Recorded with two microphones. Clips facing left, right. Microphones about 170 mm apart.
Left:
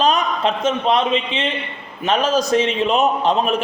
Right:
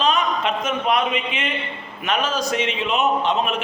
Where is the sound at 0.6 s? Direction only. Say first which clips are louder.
Left 5 dB; 30° left (ahead or behind).